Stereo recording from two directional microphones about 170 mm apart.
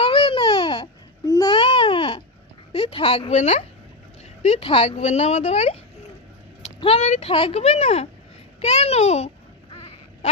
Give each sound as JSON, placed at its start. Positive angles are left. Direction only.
{"t": 0.0, "sound": "babbling", "side_deg": 30}
{"t": 2.7, "sound": "speech", "side_deg": 35}